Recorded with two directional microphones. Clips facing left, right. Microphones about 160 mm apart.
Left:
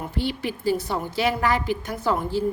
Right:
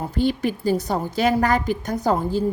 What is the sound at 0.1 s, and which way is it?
A woman's voice, 45° right (ahead or behind).